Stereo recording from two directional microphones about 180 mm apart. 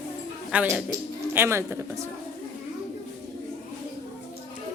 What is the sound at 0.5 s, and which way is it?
Speech, 10° right (ahead or behind).